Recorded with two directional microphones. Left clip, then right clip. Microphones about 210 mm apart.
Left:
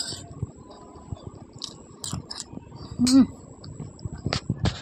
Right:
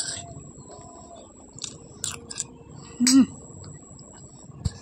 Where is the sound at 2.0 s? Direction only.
5° right (ahead or behind).